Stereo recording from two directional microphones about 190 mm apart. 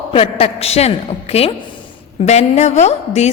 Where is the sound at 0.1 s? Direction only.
30° left (ahead or behind).